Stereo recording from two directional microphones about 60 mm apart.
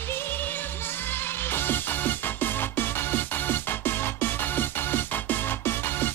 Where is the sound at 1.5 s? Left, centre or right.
Left.